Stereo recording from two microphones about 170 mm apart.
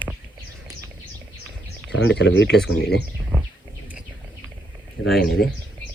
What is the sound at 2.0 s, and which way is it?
Speech, 90° left.